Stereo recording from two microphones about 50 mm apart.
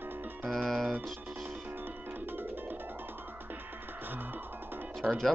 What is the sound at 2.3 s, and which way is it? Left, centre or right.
Music, right.